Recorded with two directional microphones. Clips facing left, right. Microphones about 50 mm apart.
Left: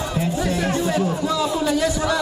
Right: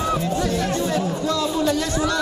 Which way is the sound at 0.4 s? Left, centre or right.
Centre.